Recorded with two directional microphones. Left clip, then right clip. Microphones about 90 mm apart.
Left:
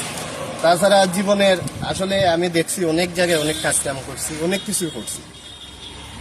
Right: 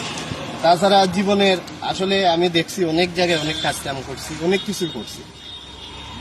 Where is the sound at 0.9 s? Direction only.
35° left (ahead or behind).